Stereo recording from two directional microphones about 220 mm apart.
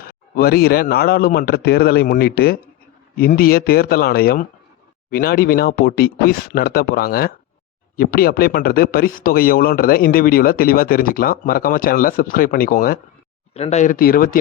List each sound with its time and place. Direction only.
0.0 s speech: 45° left (ahead or behind)
13.5 s speech: 30° left (ahead or behind)